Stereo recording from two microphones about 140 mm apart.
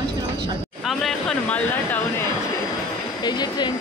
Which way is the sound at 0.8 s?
Centre (ahead or behind).